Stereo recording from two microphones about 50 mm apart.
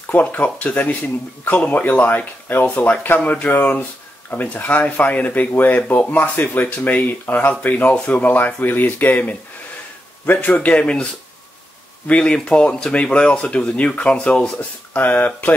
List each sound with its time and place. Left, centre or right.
0.0 s speech: left
3.2 s speech: left
12.1 s speech: left